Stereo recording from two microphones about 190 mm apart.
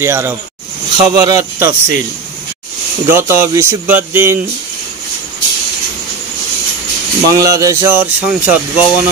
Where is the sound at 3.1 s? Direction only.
10° right (ahead or behind).